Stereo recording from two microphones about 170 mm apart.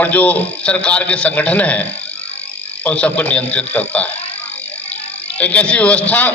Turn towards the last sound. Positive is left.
turn(degrees=10)  # may be behind; listen again after turning